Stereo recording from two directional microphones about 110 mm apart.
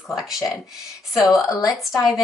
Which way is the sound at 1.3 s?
30° left (ahead or behind).